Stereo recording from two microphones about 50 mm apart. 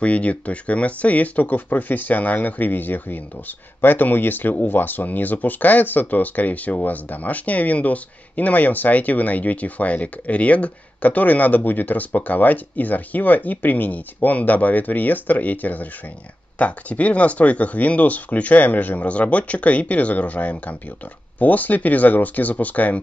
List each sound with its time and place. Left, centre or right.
0.0 s speech: left